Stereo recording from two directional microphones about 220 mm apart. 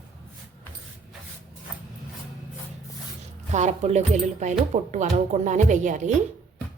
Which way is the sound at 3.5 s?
30° right (ahead or behind).